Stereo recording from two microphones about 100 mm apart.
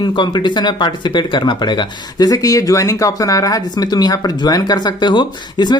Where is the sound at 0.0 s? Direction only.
50° left (ahead or behind).